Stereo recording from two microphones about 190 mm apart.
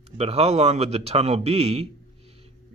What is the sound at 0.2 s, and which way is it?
Speech, 35° right (ahead or behind).